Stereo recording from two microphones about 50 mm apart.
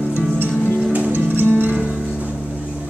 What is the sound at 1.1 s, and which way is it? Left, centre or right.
Music, right.